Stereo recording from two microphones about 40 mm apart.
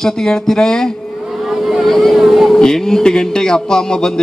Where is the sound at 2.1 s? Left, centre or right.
Centre.